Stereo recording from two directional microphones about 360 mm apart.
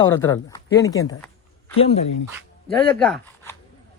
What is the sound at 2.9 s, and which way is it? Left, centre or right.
Speech, centre.